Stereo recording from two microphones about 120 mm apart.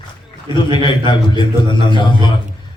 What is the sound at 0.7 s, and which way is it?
A man's voice, 40° left (ahead or behind).